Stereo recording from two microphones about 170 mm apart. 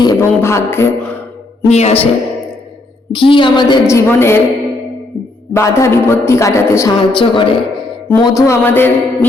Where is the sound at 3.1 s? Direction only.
30° left (ahead or behind).